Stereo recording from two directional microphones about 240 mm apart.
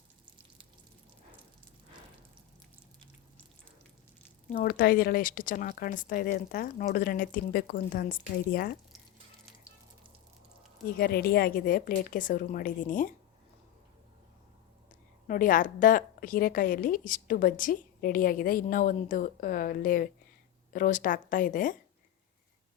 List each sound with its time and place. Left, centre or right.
4.4 s a woman's voice: left
10.8 s a woman's voice: left
15.3 s a woman's voice: left